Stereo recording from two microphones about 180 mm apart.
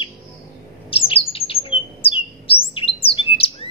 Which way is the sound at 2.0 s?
30° left (ahead or behind).